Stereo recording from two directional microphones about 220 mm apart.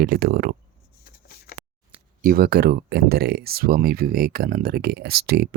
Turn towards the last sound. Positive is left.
turn(degrees=-45)  # may be behind; listen again after turning